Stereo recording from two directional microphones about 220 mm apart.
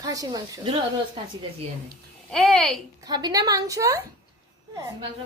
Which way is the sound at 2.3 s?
Centre (ahead or behind).